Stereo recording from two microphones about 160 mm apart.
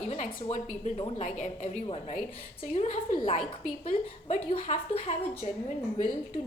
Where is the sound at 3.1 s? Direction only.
35° left (ahead or behind).